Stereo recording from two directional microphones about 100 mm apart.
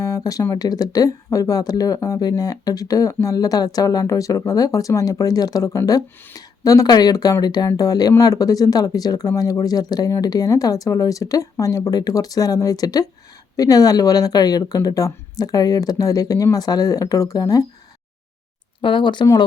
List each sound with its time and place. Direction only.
0.0 s a sound: 35° left (ahead or behind)
0.5 s speech: 40° left (ahead or behind)
18.8 s speech: 55° left (ahead or behind)